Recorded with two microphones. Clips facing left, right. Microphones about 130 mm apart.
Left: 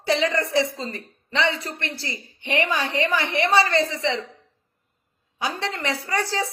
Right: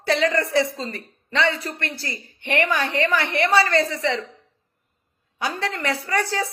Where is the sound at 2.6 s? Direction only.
60° right (ahead or behind).